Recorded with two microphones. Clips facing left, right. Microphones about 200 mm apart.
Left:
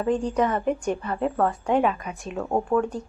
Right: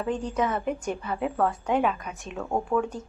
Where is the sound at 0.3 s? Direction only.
Centre (ahead or behind).